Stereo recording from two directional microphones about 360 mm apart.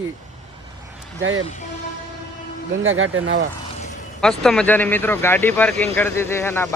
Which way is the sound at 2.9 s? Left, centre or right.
Right.